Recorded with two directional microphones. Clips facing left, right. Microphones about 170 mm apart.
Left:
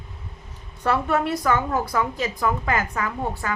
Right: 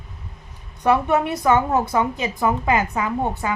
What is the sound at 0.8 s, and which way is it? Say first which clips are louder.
A woman's voice: right 4 dB; 15° right (ahead or behind).